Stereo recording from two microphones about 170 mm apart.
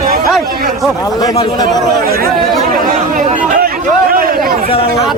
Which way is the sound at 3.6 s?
60° right (ahead or behind).